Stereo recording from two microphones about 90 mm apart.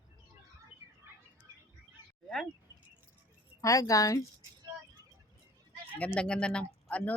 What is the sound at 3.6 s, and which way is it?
Speech, 40° left (ahead or behind).